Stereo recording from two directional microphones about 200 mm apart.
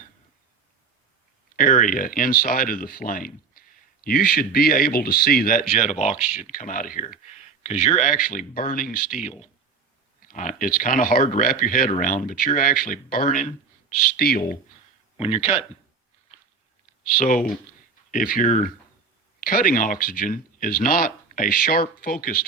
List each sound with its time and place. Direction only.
1.5 s speech: 40° left (ahead or behind)
17.1 s speech: 45° left (ahead or behind)